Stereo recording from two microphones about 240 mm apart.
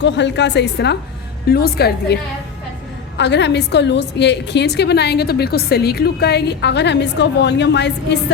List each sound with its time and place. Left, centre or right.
0.0 s a woman's voice: left
3.2 s a woman's voice: left